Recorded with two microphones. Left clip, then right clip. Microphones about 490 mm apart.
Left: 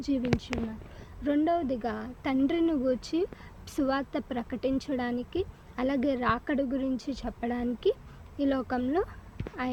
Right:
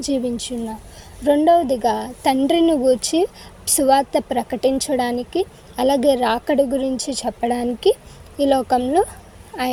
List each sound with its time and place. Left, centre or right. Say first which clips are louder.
0.0 s speech: right 8 dB; left